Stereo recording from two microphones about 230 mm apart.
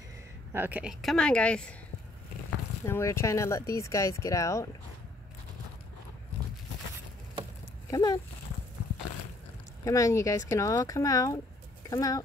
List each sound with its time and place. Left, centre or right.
0.5 s speech: centre
2.9 s speech: centre
7.9 s speech: centre
9.8 s speech: centre